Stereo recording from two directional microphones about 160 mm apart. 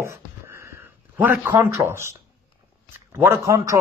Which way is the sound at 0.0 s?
15° right (ahead or behind).